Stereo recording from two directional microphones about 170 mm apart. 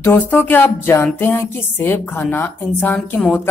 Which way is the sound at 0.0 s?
15° left (ahead or behind).